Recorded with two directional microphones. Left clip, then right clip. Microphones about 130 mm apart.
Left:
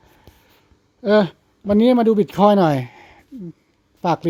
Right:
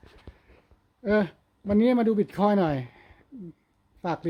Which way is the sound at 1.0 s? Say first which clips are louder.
Left 9 dB; 40° left (ahead or behind).